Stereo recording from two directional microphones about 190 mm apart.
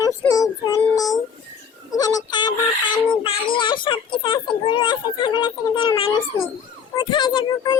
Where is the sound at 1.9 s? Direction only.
20° left (ahead or behind).